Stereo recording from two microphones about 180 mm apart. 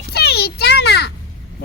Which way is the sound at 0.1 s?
60° left (ahead or behind).